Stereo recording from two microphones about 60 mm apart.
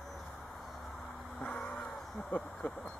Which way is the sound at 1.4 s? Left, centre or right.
Centre.